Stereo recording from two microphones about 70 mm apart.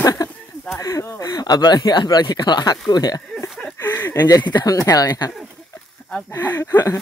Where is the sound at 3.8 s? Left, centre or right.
Left.